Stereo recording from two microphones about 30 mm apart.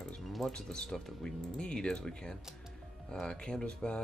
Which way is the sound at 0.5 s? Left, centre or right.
Left.